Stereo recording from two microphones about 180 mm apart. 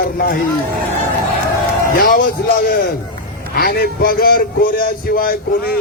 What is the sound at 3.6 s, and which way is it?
A man's voice, 55° left (ahead or behind).